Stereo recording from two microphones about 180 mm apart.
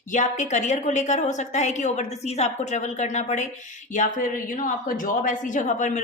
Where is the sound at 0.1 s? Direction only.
40° left (ahead or behind).